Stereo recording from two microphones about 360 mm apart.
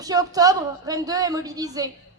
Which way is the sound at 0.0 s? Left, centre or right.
Centre.